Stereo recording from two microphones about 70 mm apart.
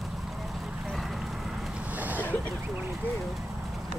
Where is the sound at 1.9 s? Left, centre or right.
Right.